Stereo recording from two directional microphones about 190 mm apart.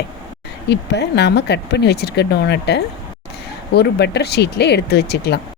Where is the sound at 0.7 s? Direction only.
60° left (ahead or behind).